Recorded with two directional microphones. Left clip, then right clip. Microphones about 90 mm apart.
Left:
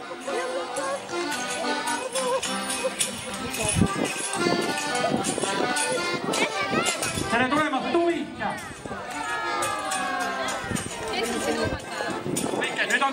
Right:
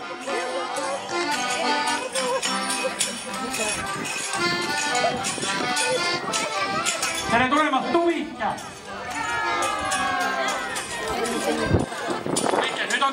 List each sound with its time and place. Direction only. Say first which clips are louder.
1.1 s music: right 4 dB; 40° right (ahead or behind)
4.4 s music: right 1 dB; 40° right (ahead or behind)
9.3 s run: right 3 dB; centre (ahead or behind)
12.4 s a sound: right 4 dB; 35° right (ahead or behind)